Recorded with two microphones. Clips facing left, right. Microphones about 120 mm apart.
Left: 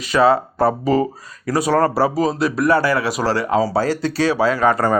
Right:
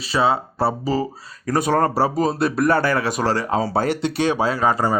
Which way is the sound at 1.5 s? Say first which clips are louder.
Left 2 dB; 50° right (ahead or behind).